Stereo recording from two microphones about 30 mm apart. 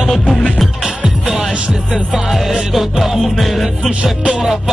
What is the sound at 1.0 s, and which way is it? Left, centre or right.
Music, centre.